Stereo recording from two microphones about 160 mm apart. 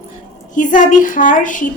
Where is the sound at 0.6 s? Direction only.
55° left (ahead or behind).